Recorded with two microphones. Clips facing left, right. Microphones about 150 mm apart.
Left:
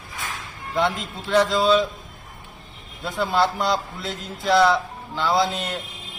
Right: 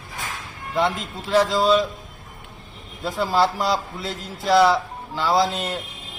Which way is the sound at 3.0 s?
Centre (ahead or behind).